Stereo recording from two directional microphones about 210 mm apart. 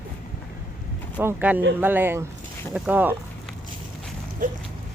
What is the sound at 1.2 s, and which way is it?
Speech, 10° right (ahead or behind).